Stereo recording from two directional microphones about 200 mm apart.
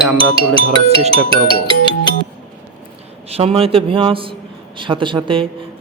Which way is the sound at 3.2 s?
30° right (ahead or behind).